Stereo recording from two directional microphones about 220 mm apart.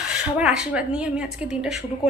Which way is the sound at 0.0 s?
5° right (ahead or behind).